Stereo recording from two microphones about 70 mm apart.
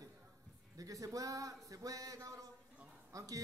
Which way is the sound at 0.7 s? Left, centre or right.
Right.